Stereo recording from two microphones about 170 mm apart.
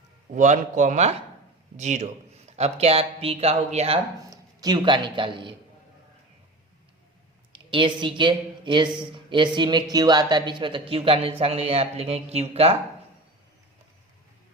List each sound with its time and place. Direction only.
0.3 s speech: 45° right (ahead or behind)
4.3 s speech: 25° right (ahead or behind)
7.5 s a woman's voice: 30° right (ahead or behind)